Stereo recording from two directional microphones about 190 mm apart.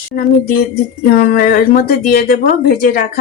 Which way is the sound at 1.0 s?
50° left (ahead or behind).